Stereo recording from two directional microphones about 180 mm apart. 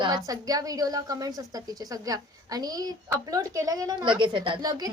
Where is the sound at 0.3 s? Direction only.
20° right (ahead or behind).